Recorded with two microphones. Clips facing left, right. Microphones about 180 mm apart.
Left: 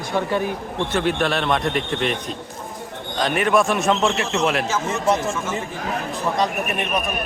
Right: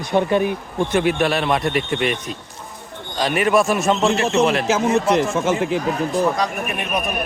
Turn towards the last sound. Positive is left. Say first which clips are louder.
# right 8 dB
turn(degrees=-85)